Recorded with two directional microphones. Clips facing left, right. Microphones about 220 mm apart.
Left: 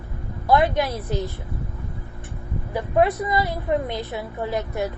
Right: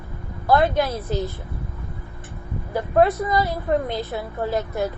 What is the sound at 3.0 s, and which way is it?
A woman's voice, 15° left (ahead or behind).